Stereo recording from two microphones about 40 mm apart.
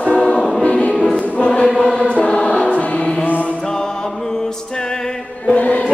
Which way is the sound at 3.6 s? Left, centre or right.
Centre.